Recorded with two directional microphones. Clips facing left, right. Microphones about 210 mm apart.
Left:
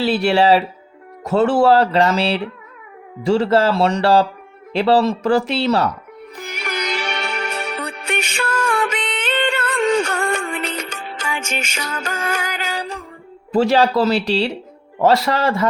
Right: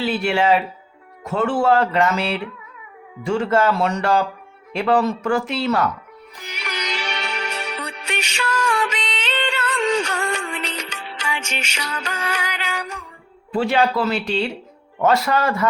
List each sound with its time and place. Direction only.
0.0 s speech: 35° left (ahead or behind)
6.4 s music: 50° left (ahead or behind); by 13.0 s 35° left (ahead or behind)
13.5 s speech: 40° left (ahead or behind)